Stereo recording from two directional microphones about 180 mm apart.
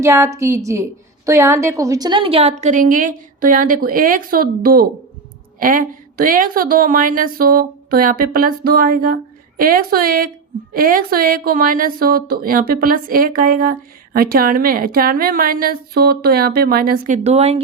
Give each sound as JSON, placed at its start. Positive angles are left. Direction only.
{"t": 0.0, "sound": "a woman's voice", "side_deg": -15}